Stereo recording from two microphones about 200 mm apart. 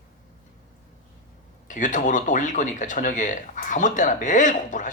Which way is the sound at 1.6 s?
40° left (ahead or behind).